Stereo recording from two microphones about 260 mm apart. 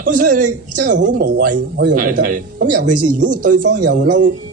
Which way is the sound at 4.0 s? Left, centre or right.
Right.